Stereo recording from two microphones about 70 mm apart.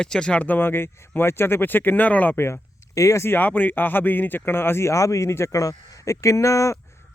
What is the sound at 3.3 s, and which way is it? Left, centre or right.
Speech, left.